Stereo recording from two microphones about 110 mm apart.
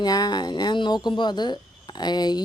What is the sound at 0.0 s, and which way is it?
A woman's voice, 35° left (ahead or behind).